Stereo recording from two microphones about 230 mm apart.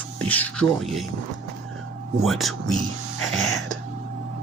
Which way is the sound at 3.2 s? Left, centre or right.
Centre.